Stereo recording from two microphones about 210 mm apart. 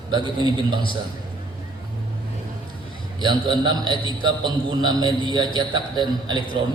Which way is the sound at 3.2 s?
20° right (ahead or behind).